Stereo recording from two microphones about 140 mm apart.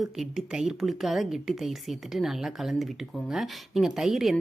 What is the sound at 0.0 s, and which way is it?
Speech, centre (ahead or behind).